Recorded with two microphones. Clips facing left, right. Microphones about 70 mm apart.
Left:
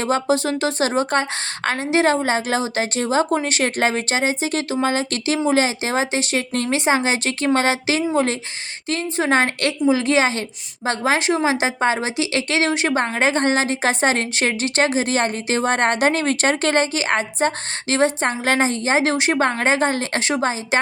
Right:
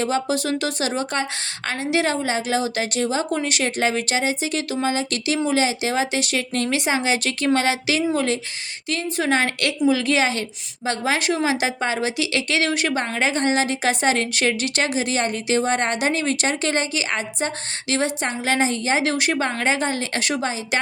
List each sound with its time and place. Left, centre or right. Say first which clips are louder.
0.0 s a woman's voice: left 3 dB; left
19.4 s a woman's voice: left 4 dB; left